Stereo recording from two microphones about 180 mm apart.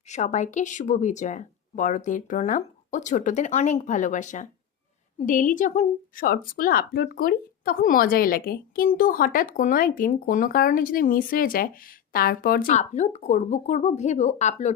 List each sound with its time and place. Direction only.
0.1 s a woman's voice: 40° left (ahead or behind)